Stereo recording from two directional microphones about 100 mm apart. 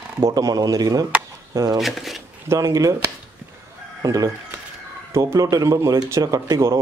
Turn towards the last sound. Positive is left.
turn(degrees=-40)  # may be behind; listen again after turning